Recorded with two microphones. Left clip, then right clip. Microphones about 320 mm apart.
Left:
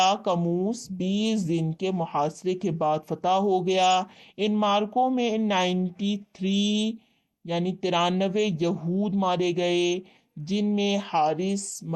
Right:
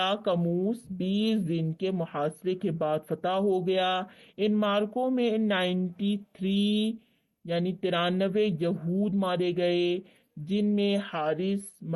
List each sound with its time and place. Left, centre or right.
0.0 s speech: left